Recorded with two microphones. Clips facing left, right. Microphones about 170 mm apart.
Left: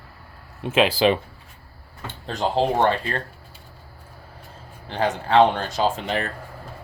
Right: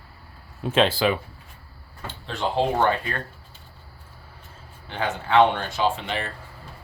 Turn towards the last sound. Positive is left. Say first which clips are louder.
# left 2 dB
turn(degrees=45)  # may be behind; listen again after turning